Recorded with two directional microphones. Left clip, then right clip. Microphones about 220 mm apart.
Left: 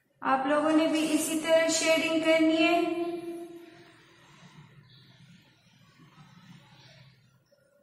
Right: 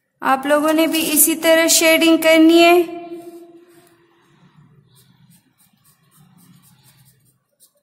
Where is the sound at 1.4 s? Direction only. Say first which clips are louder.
Right 11 dB; 50° right (ahead or behind).